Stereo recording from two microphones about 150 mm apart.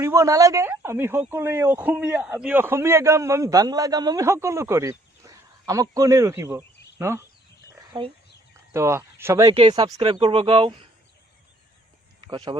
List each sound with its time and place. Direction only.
0.0 s speech: 20° right (ahead or behind)
7.9 s speech: 35° right (ahead or behind)
8.7 s speech: 20° right (ahead or behind)
9.5 s speech: 40° right (ahead or behind)